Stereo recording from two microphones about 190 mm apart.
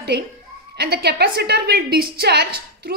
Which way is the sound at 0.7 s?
55° right (ahead or behind).